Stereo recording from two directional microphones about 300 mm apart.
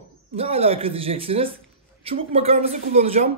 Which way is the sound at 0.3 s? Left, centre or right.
Centre.